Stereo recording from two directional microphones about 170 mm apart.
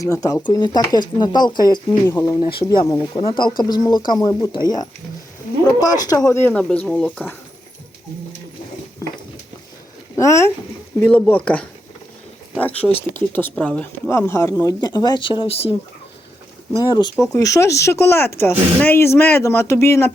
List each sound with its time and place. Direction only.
0.0 s speech: 20° left (ahead or behind)
2.4 s speech: 30° left (ahead or behind)
5.8 s speech: 20° left (ahead or behind)
10.2 s speech: 15° left (ahead or behind); by 15.7 s 30° left (ahead or behind)
16.7 s speech: 25° left (ahead or behind)